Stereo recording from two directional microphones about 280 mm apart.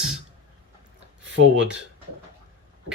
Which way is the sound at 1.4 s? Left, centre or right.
Right.